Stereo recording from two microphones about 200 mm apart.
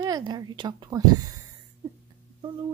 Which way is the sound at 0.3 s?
20° right (ahead or behind).